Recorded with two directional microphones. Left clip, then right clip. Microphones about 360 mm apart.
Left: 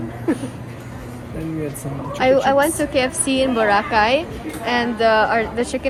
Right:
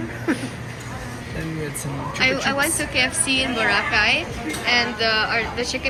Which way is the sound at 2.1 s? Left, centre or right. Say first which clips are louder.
Left 6 dB; centre.